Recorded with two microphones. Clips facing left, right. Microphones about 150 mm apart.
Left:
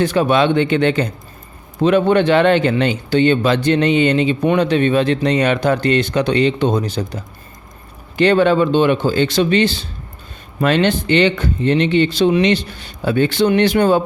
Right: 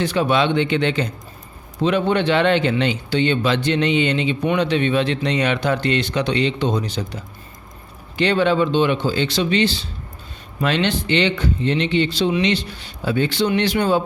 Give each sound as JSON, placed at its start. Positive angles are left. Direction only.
{"t": 0.0, "sound": "speech", "side_deg": 50}